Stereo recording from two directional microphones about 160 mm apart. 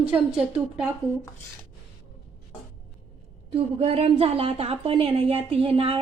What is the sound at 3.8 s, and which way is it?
A woman's voice, 40° right (ahead or behind).